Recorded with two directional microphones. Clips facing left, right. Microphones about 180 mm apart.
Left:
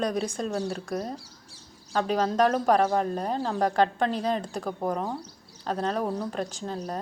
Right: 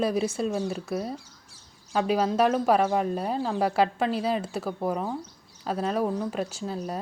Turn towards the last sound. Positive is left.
turn(degrees=-10)  # may be behind; listen again after turning